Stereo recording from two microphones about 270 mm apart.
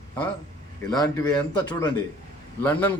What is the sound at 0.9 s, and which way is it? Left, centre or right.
Speech, centre.